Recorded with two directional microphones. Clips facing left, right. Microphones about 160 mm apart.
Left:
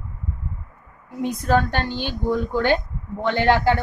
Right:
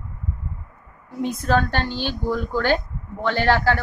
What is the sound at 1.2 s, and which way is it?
A woman's voice, 15° left (ahead or behind).